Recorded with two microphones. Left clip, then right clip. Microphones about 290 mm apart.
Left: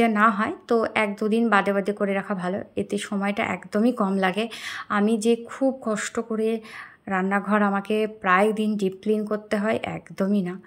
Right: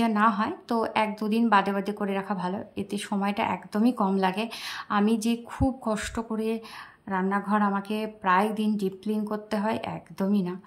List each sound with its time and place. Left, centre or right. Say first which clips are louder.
0.0 s speech: left 4 dB; centre